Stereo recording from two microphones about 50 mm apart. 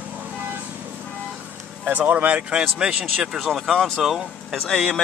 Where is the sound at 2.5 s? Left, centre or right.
Centre.